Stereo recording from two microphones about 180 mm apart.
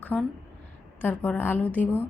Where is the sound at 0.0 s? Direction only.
5° left (ahead or behind).